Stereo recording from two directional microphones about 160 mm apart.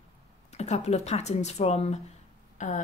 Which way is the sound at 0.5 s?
45° left (ahead or behind).